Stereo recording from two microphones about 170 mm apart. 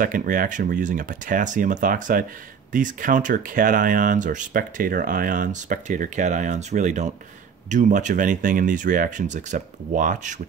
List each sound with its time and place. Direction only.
0.0 s speech: 55° right (ahead or behind)